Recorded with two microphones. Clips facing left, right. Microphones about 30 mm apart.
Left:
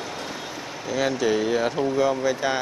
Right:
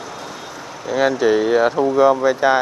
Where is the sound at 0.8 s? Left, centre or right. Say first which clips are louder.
Right 7 dB; centre.